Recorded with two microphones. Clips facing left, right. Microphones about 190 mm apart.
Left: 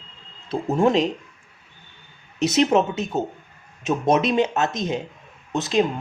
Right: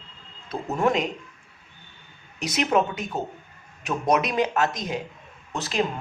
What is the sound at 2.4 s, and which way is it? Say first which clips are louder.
Speech: left 5 dB; 25° left (ahead or behind).